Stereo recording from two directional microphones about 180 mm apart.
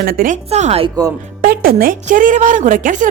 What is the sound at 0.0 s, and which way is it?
Speech, 55° right (ahead or behind).